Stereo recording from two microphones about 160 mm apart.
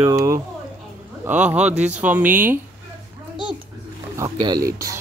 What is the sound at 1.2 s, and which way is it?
Speech, 10° right (ahead or behind).